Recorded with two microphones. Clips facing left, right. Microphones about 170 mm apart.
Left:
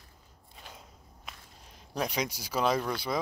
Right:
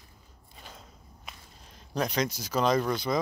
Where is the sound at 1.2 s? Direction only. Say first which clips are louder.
Even; 5° left (ahead or behind).